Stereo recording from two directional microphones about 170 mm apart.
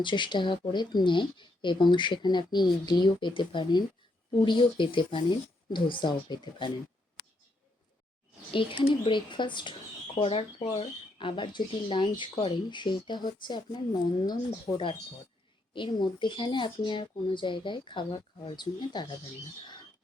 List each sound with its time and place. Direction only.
0.0 s speech: 30° left (ahead or behind)
8.5 s speech: 30° left (ahead or behind)
15.7 s speech: 30° left (ahead or behind)